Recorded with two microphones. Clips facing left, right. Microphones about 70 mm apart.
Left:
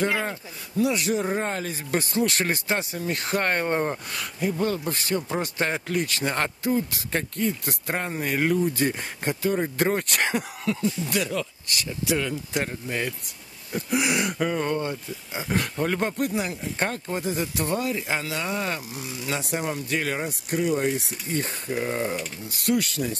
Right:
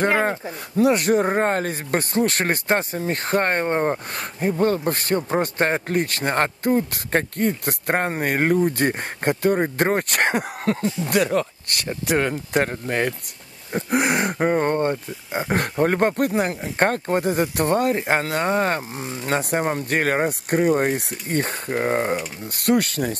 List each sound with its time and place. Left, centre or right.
0.0 s a man's voice: right
4.1 s a man's voice: right